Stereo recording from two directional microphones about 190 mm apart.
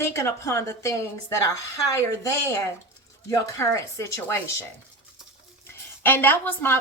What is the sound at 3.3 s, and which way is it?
A woman's voice, 15° left (ahead or behind).